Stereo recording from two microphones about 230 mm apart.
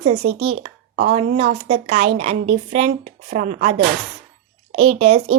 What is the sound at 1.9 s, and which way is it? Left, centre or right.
A woman's voice, right.